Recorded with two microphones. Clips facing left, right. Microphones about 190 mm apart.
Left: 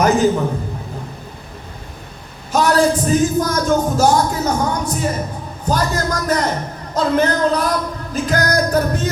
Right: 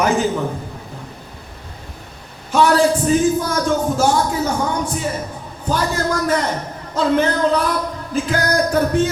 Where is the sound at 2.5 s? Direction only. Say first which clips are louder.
Right 2 dB; 40° left (ahead or behind).